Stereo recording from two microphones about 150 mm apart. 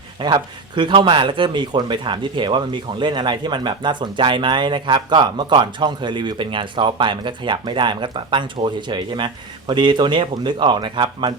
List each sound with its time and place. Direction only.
0.2 s speech: 30° right (ahead or behind)